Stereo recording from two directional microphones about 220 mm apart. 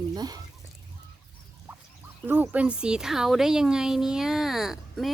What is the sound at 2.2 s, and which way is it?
Speech, 10° right (ahead or behind).